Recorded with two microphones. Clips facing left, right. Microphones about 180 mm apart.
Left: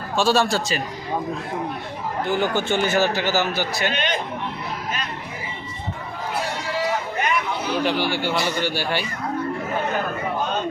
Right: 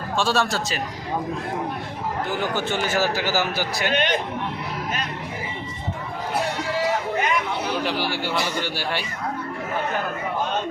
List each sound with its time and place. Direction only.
0.2 s speech: centre (ahead or behind)
2.3 s a man's voice: 5° right (ahead or behind)
3.9 s a man's voice: 55° right (ahead or behind)
7.9 s speech: 5° right (ahead or behind)